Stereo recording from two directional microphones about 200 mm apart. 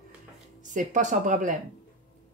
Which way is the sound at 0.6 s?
40° right (ahead or behind).